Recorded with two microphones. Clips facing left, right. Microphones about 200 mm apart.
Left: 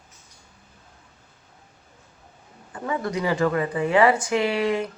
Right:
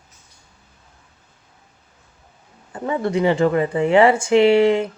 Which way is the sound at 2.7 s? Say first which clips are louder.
Right 6 dB; 25° right (ahead or behind).